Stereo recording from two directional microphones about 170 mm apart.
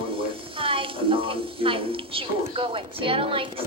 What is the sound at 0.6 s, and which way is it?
A woman's voice, 30° right (ahead or behind).